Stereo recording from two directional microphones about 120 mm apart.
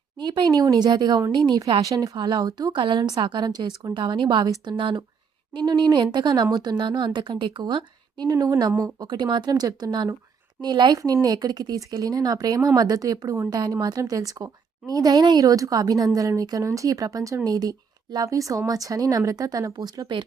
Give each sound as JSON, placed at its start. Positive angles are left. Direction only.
{"t": 0.2, "sound": "a woman's voice", "side_deg": -40}
{"t": 1.8, "sound": "a woman's voice", "side_deg": -30}